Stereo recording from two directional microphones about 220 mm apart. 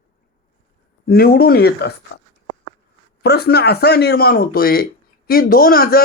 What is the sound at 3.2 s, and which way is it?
Speech, 45° left (ahead or behind).